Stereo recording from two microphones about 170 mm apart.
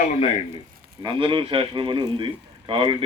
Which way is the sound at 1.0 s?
30° right (ahead or behind).